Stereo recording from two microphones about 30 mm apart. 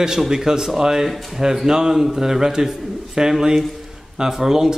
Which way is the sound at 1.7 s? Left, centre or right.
Right.